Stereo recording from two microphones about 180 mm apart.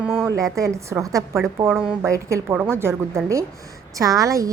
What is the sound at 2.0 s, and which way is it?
A woman's voice, 15° right (ahead or behind).